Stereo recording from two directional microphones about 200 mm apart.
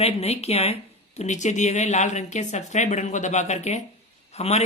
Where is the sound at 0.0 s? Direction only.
30° left (ahead or behind).